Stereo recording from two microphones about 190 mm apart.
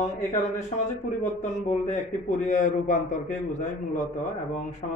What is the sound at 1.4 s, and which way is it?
A man's voice, 40° left (ahead or behind).